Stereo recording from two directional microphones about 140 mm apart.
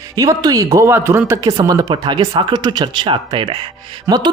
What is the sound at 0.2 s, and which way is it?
A man's voice, 25° right (ahead or behind).